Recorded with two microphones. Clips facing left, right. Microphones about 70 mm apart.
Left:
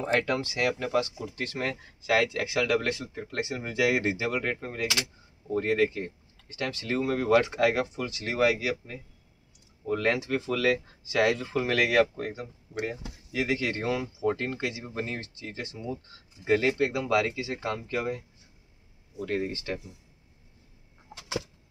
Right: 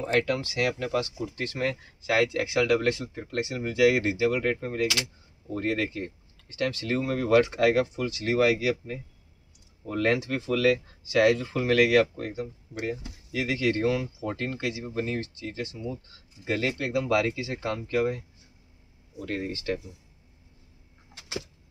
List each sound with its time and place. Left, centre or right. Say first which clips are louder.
0.0 s speech: right 1 dB; left
1.1 s speech: right 2 dB; centre
2.0 s speech: right 1 dB; centre
2.5 s speech: right 3 dB; centre
3.3 s speech: right 4 dB; left
4.3 s speech: right 4 dB; centre
9.8 s speech: right 1 dB; centre; by 16.9 s left
17.0 s speech: right 1 dB; centre